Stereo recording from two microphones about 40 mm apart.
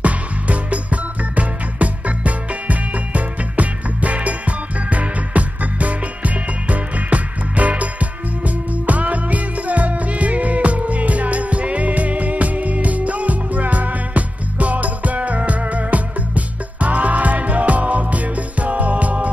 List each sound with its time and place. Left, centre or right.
0.0 s music: right